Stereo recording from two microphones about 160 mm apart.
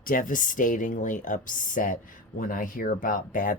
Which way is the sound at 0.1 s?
55° left (ahead or behind).